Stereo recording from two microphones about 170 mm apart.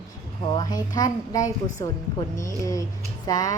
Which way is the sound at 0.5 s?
20° left (ahead or behind).